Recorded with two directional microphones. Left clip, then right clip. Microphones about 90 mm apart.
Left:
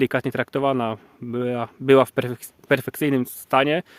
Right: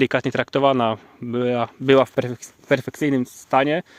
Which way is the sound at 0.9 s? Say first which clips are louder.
Right 3 dB; 20° left (ahead or behind).